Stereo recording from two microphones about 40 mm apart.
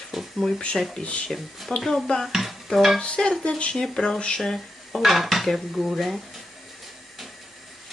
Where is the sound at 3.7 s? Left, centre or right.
Centre.